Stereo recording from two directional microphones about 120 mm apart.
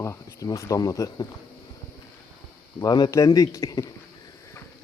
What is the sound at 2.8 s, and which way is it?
A man's voice, 30° left (ahead or behind).